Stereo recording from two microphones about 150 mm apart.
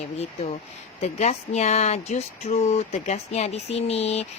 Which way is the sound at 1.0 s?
50° left (ahead or behind).